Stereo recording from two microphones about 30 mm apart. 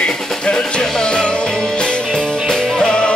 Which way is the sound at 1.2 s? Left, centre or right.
Left.